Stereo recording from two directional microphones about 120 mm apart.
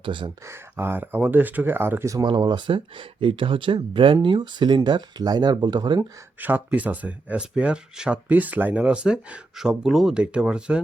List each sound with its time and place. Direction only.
0.0 s speech: 40° right (ahead or behind)
0.4 s speech: 20° right (ahead or behind)
2.2 s speech: 35° right (ahead or behind)
6.0 s speech: 15° right (ahead or behind)